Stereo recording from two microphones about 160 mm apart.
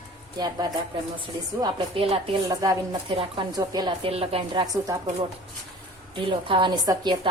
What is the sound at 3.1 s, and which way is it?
A woman's voice, 35° right (ahead or behind).